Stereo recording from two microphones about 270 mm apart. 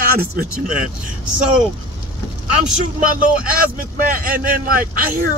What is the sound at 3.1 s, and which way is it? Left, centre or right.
A man's voice, right.